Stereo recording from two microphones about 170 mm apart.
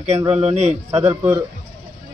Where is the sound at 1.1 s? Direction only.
15° right (ahead or behind).